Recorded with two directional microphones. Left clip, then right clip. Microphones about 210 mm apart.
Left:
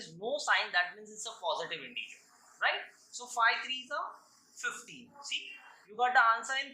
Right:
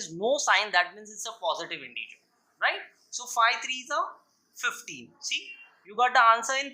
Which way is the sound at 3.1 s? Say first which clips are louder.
Right 5 dB; 40° right (ahead or behind).